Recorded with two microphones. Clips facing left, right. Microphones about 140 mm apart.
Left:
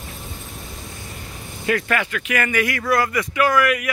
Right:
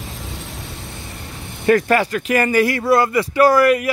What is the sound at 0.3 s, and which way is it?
Vehicle, 90° right.